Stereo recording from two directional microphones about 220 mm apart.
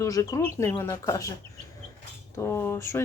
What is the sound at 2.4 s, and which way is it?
Speech, 10° left (ahead or behind).